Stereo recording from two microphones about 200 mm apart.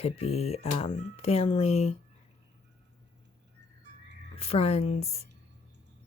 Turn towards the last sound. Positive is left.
turn(degrees=30)  # may be behind; listen again after turning